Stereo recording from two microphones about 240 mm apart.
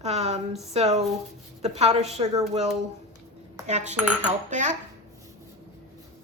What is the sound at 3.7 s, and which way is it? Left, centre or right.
A woman's voice, right.